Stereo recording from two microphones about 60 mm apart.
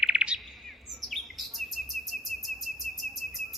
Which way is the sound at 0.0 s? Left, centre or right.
Centre.